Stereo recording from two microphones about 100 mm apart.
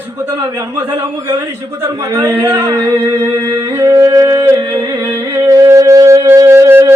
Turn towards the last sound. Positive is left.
turn(degrees=-25)  # may be behind; listen again after turning